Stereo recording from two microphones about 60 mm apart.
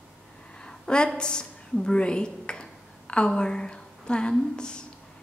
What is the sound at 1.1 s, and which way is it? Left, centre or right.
A woman's voice, centre.